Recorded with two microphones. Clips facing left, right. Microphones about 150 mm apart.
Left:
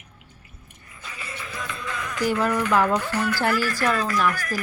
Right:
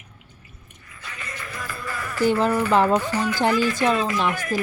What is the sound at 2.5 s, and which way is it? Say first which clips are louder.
Speech: right 2 dB; 10° right (ahead or behind).